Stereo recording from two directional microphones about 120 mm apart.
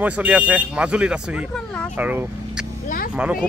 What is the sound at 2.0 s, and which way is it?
Speech, 15° right (ahead or behind).